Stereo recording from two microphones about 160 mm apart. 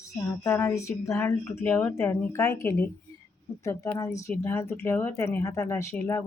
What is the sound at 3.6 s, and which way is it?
Female singing, 20° left (ahead or behind).